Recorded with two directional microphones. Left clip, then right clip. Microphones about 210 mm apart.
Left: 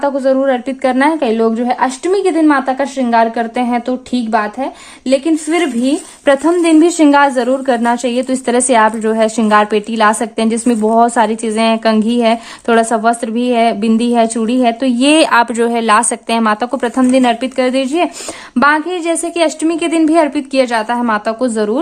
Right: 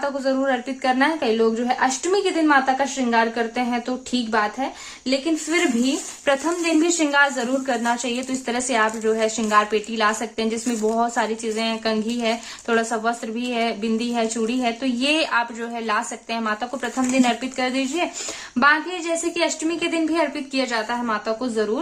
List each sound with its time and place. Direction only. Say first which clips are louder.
0.0 s a woman's voice: left 10 dB; 40° left (ahead or behind)